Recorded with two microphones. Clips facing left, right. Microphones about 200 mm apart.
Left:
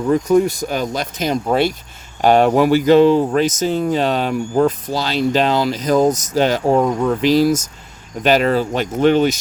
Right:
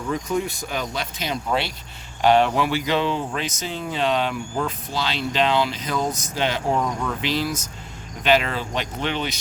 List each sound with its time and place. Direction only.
0.1 s speech: 40° left (ahead or behind)